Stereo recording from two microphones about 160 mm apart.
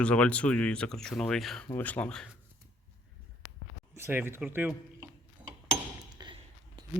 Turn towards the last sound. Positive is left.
turn(degrees=-30)  # may be behind; listen again after turning